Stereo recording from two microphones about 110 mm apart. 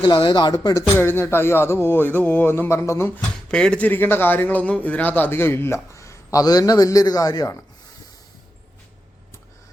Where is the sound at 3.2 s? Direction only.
10° left (ahead or behind); by 7.5 s 35° left (ahead or behind).